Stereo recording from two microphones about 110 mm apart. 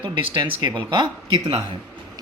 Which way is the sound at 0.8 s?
50° right (ahead or behind).